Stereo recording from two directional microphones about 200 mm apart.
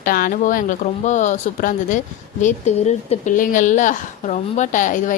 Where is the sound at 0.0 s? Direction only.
45° left (ahead or behind).